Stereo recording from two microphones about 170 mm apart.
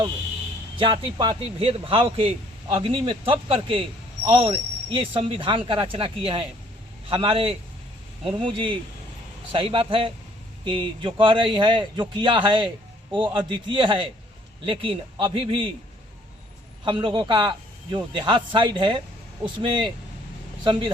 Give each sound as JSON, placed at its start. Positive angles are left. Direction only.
{"t": 0.8, "sound": "a man's voice", "side_deg": -30}
{"t": 16.8, "sound": "a man's voice", "side_deg": -30}
{"t": 20.7, "sound": "a man's voice", "side_deg": -30}